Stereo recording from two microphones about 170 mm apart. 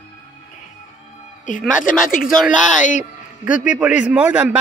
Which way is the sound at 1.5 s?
50° left (ahead or behind).